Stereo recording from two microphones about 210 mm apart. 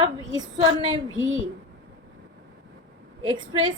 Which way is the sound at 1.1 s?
70° right (ahead or behind).